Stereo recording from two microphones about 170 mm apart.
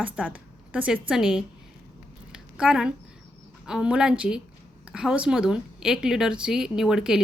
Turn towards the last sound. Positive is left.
turn(degrees=-5)  # may be behind; listen again after turning